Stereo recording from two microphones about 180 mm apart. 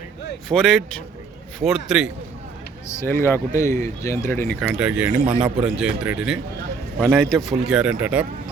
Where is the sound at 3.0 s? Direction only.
15° left (ahead or behind).